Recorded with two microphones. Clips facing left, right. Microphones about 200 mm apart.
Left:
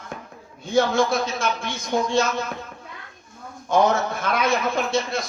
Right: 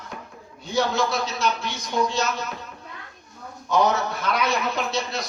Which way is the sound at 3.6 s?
50° left (ahead or behind).